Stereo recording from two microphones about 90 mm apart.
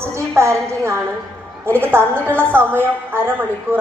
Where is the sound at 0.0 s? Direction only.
30° right (ahead or behind).